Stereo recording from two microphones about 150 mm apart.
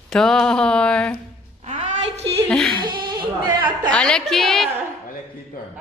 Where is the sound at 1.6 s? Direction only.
50° right (ahead or behind).